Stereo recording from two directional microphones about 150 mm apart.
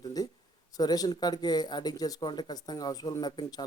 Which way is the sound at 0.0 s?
25° left (ahead or behind).